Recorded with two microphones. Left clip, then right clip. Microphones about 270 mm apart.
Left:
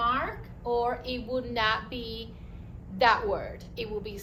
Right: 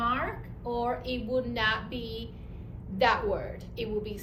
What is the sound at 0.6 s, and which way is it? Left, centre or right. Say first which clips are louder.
A woman's voice: left 3 dB; centre.